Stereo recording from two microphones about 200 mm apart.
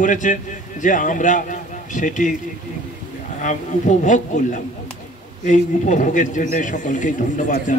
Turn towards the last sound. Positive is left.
turn(degrees=40)  # may be behind; listen again after turning